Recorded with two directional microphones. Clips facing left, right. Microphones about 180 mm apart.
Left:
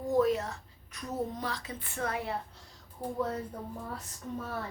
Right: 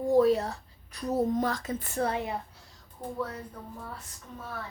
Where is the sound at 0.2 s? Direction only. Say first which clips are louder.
Right 3 dB; 35° right (ahead or behind).